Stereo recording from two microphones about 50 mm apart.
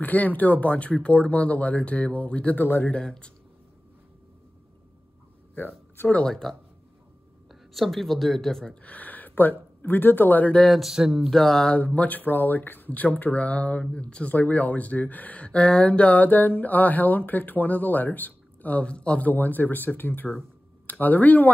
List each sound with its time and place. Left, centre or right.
0.0 s speech: left
2.6 s speech: left
2.9 s speech: centre
6.0 s speech: left
7.7 s speech: centre
8.8 s speech: left
10.6 s speech: centre
11.2 s a sound: centre
11.7 s speech: left
19.2 s speech: left